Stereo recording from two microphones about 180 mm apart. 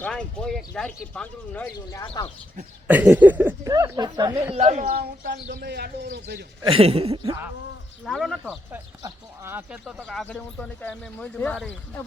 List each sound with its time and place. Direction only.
0.0 s speech: 5° left (ahead or behind)
2.8 s speech: 10° right (ahead or behind)
4.5 s speech: 40° right (ahead or behind)
4.9 s speech: 60° right (ahead or behind)
6.7 s speech: 30° right (ahead or behind)
8.0 s a sound: centre (ahead or behind)
8.7 s a sound: 15° right (ahead or behind)
9.8 s speech: centre (ahead or behind)